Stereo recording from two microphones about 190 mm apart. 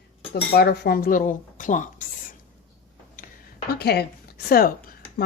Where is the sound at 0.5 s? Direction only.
55° left (ahead or behind).